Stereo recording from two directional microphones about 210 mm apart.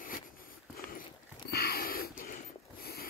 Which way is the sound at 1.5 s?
45° left (ahead or behind).